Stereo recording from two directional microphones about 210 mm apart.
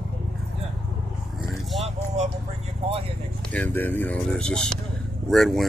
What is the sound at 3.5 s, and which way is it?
Speech, 10° left (ahead or behind).